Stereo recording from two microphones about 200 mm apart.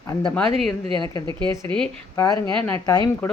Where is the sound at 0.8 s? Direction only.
25° right (ahead or behind).